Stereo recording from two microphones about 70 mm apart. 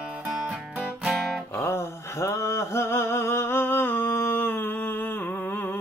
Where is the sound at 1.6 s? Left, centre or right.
Left.